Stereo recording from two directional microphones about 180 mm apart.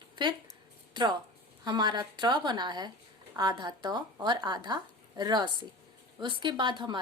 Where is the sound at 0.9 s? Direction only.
25° right (ahead or behind).